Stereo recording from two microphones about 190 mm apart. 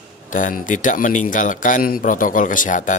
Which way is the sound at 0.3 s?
45° left (ahead or behind).